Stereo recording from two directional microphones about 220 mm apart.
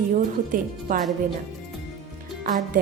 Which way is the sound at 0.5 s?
40° right (ahead or behind).